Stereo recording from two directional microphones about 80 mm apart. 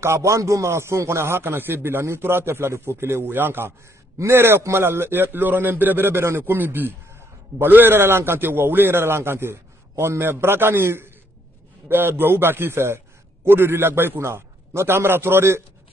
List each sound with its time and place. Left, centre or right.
0.0 s a man's voice: right